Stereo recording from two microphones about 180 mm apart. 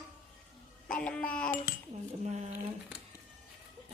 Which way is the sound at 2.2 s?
40° right (ahead or behind).